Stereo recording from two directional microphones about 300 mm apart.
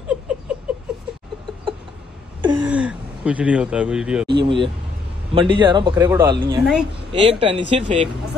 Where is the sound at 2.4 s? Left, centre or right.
Centre.